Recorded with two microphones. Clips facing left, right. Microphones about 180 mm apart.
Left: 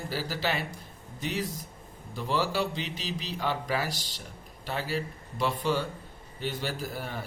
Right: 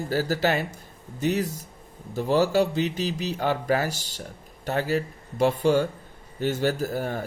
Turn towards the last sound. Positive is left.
turn(degrees=-45)  # may be behind; listen again after turning